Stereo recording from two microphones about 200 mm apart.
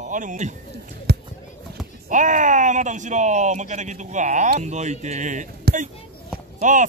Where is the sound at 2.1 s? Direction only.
40° right (ahead or behind).